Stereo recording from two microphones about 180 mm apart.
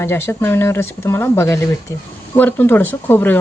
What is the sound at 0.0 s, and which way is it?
A woman's voice, 15° left (ahead or behind).